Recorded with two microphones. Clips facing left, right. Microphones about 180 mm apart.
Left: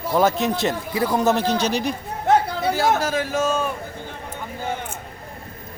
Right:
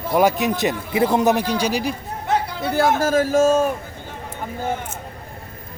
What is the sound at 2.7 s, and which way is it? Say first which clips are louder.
Speech: right 5 dB; 50° right (ahead or behind).